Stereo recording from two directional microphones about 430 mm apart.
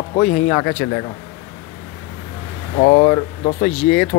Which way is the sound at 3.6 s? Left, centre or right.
Centre.